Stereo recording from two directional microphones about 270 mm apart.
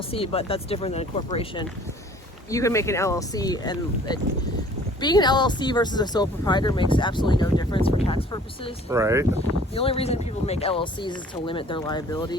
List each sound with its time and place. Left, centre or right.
0.1 s speech: left
8.9 s speech: centre
9.7 s speech: left